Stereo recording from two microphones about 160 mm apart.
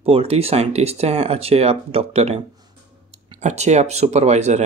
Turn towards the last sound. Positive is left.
turn(degrees=-45)  # may be behind; listen again after turning